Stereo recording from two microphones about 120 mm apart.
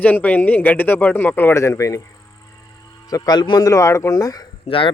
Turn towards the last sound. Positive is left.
turn(degrees=45)  # may be behind; listen again after turning